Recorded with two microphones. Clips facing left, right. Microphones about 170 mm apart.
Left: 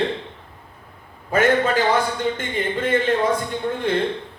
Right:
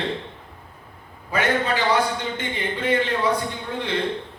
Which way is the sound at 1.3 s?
50° left (ahead or behind).